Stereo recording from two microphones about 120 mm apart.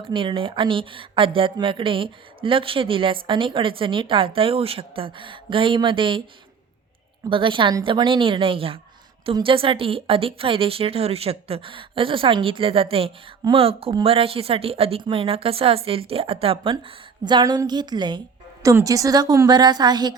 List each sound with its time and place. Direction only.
0.1 s speech: 45° right (ahead or behind)
7.3 s a woman's voice: 45° right (ahead or behind)